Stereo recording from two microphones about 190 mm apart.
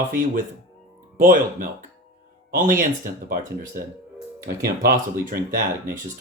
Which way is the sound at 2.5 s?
45° right (ahead or behind).